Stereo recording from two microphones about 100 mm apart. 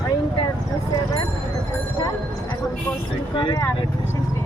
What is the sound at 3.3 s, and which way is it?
Speech, 55° left (ahead or behind).